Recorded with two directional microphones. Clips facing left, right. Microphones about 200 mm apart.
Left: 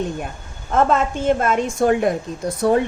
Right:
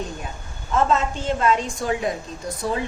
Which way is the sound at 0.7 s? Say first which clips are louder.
Left 3 dB; 55° left (ahead or behind).